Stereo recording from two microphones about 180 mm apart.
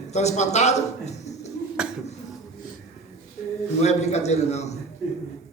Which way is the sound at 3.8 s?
40° left (ahead or behind).